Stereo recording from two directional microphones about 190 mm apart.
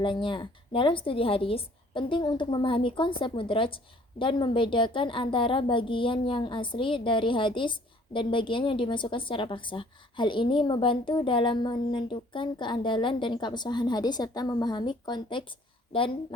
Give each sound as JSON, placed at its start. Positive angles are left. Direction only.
{"t": 0.0, "sound": "a woman's voice", "side_deg": 25}